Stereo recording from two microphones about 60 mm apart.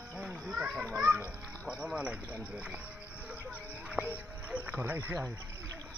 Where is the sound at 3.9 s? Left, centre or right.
Right.